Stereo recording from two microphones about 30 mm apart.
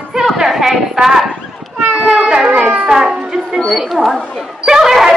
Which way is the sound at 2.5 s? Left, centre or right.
Right.